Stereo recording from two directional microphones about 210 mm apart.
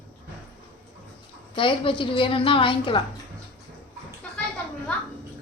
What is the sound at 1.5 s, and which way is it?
A woman's voice, 25° left (ahead or behind).